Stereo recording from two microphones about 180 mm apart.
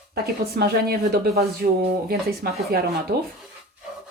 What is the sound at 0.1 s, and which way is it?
Speech, 60° right (ahead or behind).